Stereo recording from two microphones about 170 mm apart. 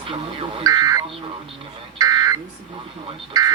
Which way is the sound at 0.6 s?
20° right (ahead or behind).